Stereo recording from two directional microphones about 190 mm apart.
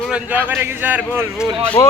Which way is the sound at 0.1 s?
10° right (ahead or behind).